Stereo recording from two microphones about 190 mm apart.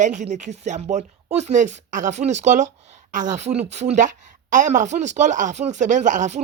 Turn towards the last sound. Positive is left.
turn(degrees=-40)  # may be behind; listen again after turning